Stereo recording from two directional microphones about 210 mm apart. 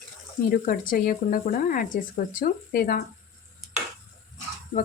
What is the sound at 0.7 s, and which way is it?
Speech, 40° left (ahead or behind).